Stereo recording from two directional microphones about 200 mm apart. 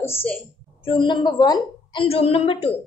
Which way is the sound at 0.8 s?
25° left (ahead or behind).